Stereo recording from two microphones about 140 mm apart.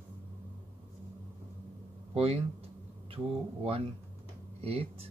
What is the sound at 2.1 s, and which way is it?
Speech, 45° right (ahead or behind).